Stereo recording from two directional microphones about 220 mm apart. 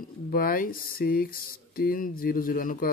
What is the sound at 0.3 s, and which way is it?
Speech, 40° left (ahead or behind).